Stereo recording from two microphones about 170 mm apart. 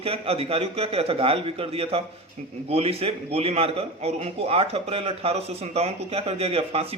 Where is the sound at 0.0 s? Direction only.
35° right (ahead or behind).